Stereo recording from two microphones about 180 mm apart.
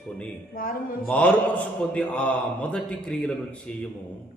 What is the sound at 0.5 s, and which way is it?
Speech, 50° left (ahead or behind).